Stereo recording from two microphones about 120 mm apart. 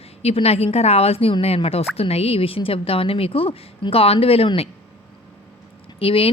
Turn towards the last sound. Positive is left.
turn(degrees=50)  # may be behind; listen again after turning